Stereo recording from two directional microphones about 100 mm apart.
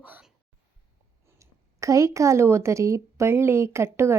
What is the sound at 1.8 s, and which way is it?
A woman's voice, 30° right (ahead or behind).